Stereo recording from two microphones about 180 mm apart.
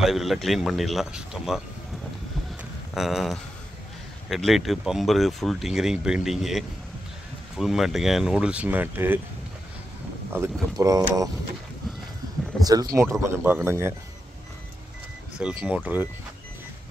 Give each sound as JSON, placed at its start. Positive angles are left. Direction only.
{"t": 0.0, "sound": "speech", "side_deg": 0}
{"t": 2.9, "sound": "speech", "side_deg": 0}
{"t": 10.3, "sound": "speech", "side_deg": -15}
{"t": 12.9, "sound": "speech", "side_deg": -15}
{"t": 15.4, "sound": "speech", "side_deg": -5}